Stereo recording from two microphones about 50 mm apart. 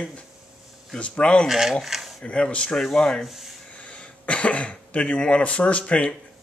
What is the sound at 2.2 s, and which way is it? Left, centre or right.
Speech, left.